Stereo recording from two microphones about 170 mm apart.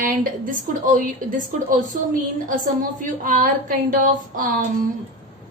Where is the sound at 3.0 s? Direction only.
45° right (ahead or behind).